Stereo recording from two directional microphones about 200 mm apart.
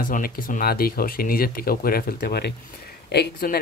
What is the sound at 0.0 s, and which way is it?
Speech, 45° left (ahead or behind).